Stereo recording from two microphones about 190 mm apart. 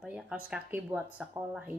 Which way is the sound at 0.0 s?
5° right (ahead or behind).